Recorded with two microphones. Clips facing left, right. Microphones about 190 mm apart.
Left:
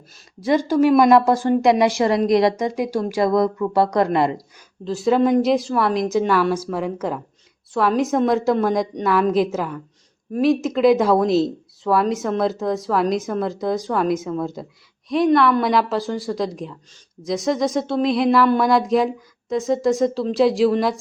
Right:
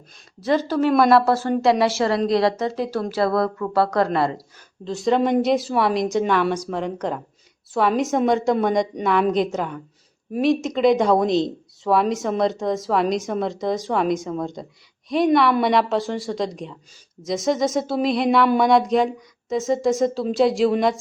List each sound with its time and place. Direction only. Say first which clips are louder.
0.3 s a woman's voice: left 3 dB; 10° left (ahead or behind)
4.9 s speech: left 2 dB; 5° left (ahead or behind)